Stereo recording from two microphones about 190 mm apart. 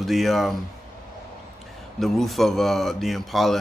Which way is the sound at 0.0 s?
Centre (ahead or behind).